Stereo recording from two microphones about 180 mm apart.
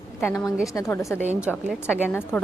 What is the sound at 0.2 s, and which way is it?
A woman's voice, 15° left (ahead or behind).